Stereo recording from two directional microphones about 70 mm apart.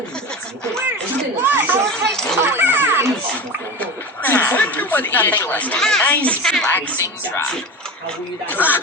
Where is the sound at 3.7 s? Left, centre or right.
Left.